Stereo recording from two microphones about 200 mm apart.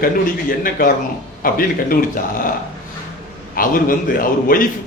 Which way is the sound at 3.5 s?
45° left (ahead or behind).